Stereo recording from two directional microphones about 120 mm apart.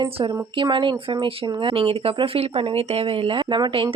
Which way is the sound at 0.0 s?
45° right (ahead or behind).